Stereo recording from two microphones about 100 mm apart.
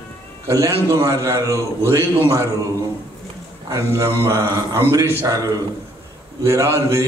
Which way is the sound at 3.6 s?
30° right (ahead or behind).